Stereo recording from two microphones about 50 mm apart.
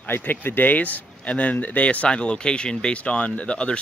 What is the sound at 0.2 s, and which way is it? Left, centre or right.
Speech, left.